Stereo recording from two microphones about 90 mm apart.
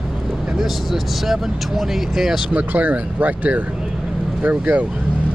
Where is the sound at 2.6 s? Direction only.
20° right (ahead or behind).